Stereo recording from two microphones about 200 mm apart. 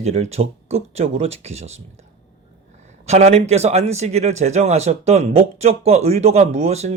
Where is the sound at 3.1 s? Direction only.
30° right (ahead or behind).